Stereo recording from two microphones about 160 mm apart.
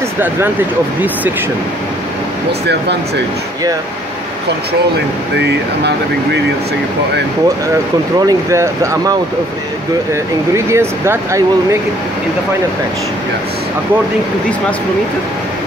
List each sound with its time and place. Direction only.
5.3 s speech: 90° right
8.3 s speech: 20° right (ahead or behind)
10.5 s speech: 15° right (ahead or behind)